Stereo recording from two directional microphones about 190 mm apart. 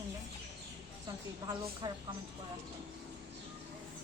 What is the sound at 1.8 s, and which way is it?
Speech, 25° right (ahead or behind).